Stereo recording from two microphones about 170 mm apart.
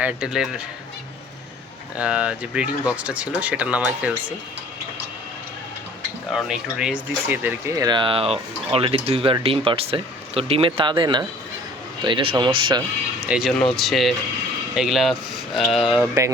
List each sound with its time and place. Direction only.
0.0 s speech: 5° right (ahead or behind)
2.0 s speech: 5° right (ahead or behind)
6.3 s speech: 5° right (ahead or behind)
7.7 s speech: 25° right (ahead or behind)
13.2 s speech: 5° right (ahead or behind)